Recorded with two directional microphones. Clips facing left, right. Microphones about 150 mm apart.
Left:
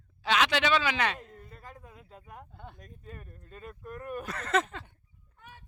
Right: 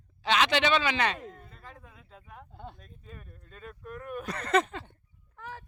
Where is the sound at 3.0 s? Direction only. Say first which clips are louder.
Left 2 dB; 5° left (ahead or behind).